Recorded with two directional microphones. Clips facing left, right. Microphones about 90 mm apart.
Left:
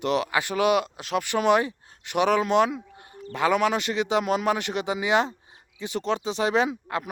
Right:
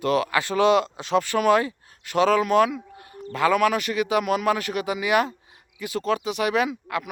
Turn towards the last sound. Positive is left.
turn(degrees=30)  # may be behind; listen again after turning